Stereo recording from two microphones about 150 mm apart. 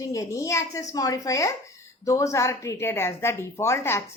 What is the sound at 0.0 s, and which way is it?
A woman's voice, 20° left (ahead or behind).